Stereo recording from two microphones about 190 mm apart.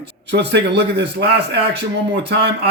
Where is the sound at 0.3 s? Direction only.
65° right (ahead or behind).